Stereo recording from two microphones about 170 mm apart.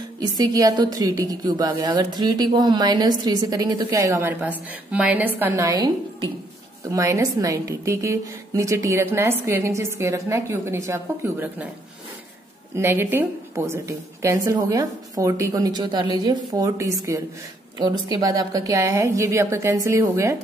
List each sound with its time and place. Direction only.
0.2 s a woman's voice: 20° right (ahead or behind)
6.9 s a woman's voice: 20° right (ahead or behind)
12.7 s a woman's voice: 15° right (ahead or behind)